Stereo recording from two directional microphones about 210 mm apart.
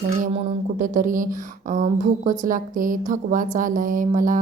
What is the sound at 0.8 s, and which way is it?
Speech, 40° right (ahead or behind).